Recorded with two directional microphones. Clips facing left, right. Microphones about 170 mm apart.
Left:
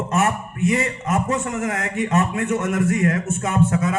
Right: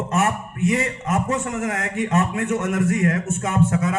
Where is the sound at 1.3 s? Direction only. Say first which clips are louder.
Left 1 dB; 40° left (ahead or behind).